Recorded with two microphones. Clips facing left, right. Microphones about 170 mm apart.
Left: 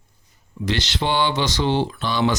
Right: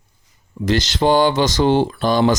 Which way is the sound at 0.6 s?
45° right (ahead or behind).